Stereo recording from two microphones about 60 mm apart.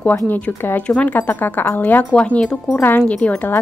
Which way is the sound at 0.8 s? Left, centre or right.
Centre.